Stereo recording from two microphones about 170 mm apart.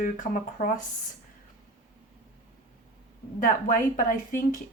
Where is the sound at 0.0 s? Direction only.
50° left (ahead or behind).